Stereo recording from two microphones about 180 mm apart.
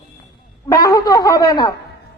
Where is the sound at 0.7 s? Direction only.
20° left (ahead or behind).